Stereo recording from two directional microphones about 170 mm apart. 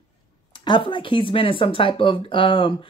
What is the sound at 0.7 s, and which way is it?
Speech, 30° left (ahead or behind).